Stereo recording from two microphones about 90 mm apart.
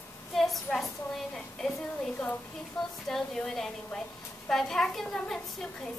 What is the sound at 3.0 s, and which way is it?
A woman's voice, 5° left (ahead or behind).